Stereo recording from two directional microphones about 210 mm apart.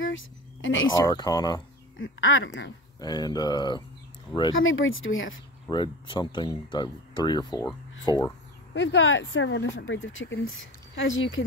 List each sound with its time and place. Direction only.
0.0 s a sound: 65° left (ahead or behind)
1.0 s speech: 20° left (ahead or behind)
2.0 s speech: 65° left (ahead or behind)
3.0 s speech: 20° left (ahead or behind)
4.6 s speech: 70° left (ahead or behind)
5.7 s speech: 20° left (ahead or behind)
8.7 s speech: 60° left (ahead or behind)